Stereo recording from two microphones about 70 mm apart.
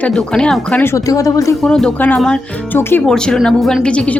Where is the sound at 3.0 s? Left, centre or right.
Centre.